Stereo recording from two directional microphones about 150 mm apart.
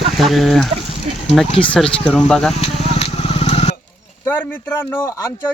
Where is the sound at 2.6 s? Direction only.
45° left (ahead or behind).